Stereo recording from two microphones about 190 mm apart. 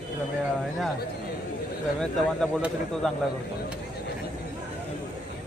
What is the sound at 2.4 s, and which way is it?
Speech, centre (ahead or behind).